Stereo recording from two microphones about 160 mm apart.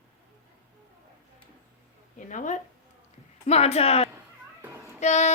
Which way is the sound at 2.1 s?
55° left (ahead or behind).